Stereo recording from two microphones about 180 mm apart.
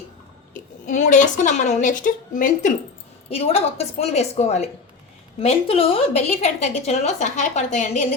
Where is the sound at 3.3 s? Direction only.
35° left (ahead or behind).